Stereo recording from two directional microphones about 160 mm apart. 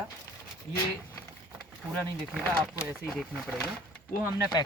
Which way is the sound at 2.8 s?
Centre (ahead or behind).